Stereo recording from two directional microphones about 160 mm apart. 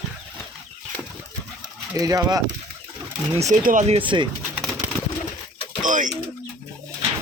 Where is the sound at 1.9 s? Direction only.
20° right (ahead or behind).